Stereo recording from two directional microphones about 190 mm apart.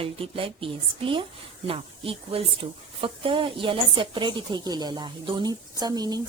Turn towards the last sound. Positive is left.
turn(degrees=-20)  # may be behind; listen again after turning